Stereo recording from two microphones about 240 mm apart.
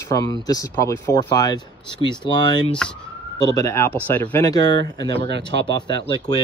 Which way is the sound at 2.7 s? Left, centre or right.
Centre.